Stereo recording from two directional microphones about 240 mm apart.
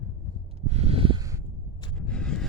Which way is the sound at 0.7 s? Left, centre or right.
Right.